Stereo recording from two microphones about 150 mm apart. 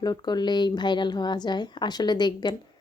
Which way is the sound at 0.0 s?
30° left (ahead or behind).